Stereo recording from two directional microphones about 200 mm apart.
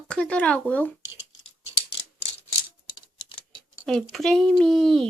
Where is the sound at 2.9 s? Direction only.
20° left (ahead or behind).